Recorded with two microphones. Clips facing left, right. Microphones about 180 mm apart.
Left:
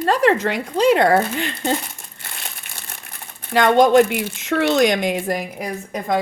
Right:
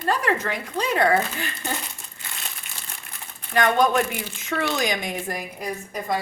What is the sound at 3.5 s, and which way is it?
A woman's voice, 80° left.